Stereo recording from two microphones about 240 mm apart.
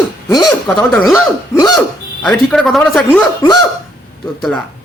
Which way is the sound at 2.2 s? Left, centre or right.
Centre.